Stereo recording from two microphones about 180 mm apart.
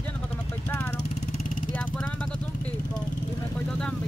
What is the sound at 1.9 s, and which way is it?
Vehicle, 5° left (ahead or behind).